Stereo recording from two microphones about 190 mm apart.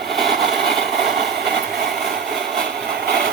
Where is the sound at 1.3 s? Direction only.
60° right (ahead or behind).